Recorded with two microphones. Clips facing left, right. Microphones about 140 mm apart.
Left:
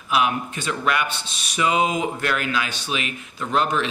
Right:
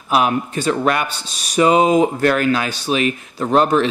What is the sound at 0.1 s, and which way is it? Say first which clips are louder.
A man's voice: right 5 dB; 40° right (ahead or behind).